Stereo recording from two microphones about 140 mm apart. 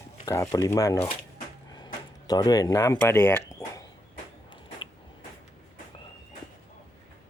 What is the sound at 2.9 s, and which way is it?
Speech, 15° left (ahead or behind).